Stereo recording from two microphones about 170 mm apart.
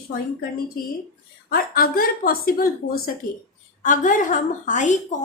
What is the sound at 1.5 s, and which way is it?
A woman's voice, 60° left (ahead or behind).